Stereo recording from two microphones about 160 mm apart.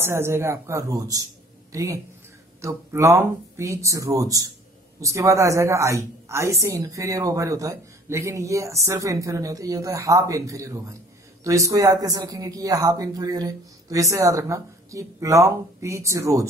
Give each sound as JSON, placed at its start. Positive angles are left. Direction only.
{"t": 0.0, "sound": "speech", "side_deg": -15}